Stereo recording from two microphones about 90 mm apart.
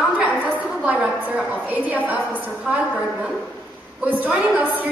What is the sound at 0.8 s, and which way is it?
A woman's voice, 15° right (ahead or behind).